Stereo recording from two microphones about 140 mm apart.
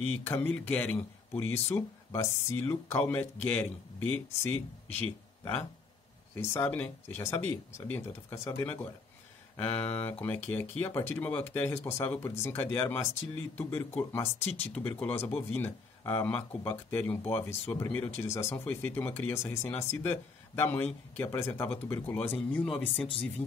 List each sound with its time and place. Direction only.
0.2 s speech: 15° left (ahead or behind)
6.3 s speech: 15° left (ahead or behind)
14.4 s speech: 50° left (ahead or behind)
14.8 s speech: 10° left (ahead or behind)